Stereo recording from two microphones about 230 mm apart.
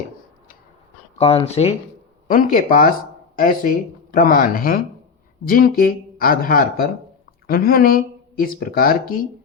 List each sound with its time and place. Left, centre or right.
1.2 s speech: left
2.2 s speech: left